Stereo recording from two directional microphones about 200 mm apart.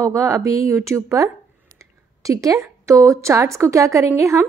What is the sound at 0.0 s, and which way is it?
A woman's voice, 15° right (ahead or behind).